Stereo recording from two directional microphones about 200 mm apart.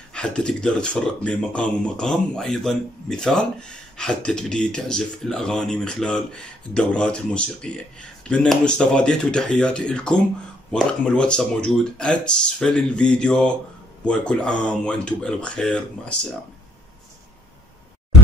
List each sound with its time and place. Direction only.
0.1 s speech: 5° left (ahead or behind)